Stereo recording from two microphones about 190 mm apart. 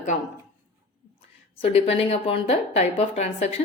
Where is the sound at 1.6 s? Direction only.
30° left (ahead or behind).